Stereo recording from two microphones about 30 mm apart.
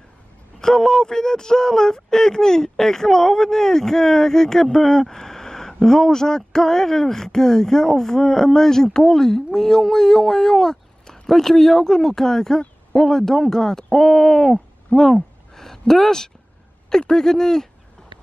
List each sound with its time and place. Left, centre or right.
0.6 s a man's voice: centre
15.0 s a sound: centre
15.9 s a man's voice: centre